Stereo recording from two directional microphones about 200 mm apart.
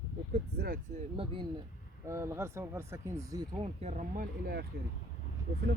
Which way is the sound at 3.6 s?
35° right (ahead or behind).